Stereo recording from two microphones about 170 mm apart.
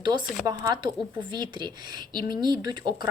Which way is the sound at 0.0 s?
25° right (ahead or behind).